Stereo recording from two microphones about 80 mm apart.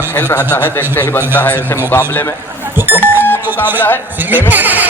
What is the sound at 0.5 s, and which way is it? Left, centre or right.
Speech, left.